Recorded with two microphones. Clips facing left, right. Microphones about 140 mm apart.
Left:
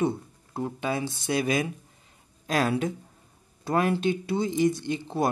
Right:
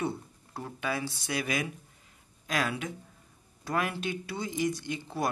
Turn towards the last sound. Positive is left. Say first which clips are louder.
# left 6 dB
turn(degrees=25)  # may be behind; listen again after turning